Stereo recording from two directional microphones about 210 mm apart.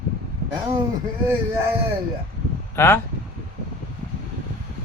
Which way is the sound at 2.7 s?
10° left (ahead or behind).